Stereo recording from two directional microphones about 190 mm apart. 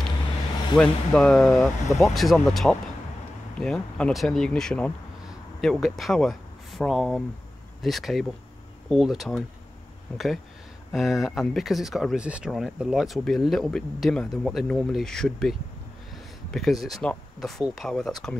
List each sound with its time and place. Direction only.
0.7 s speech: 5° left (ahead or behind)